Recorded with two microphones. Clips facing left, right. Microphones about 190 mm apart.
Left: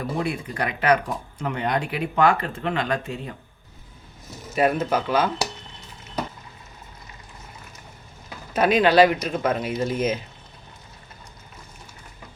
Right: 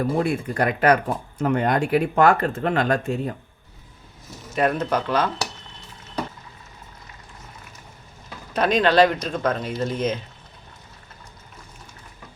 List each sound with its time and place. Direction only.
0.2 s speech: 45° right (ahead or behind)
4.5 s speech: 5° left (ahead or behind)
8.5 s speech: 5° left (ahead or behind)